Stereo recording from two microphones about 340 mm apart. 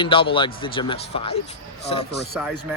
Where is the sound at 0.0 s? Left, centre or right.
Centre.